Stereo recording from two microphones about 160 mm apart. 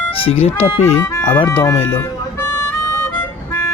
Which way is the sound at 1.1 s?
15° left (ahead or behind).